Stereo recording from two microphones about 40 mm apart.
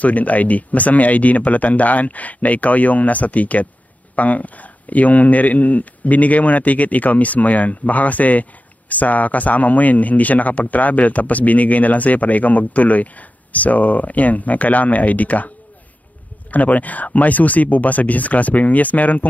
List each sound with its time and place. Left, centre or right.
0.0 s speech: left